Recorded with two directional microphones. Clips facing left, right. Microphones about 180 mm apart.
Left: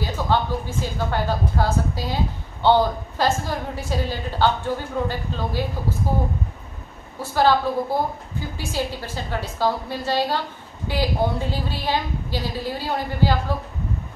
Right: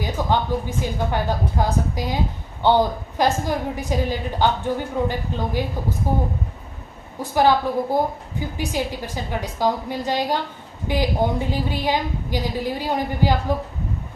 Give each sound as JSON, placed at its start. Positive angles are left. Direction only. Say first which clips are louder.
{"t": 0.0, "sound": "a woman's voice", "louder": "even", "side_deg": -15}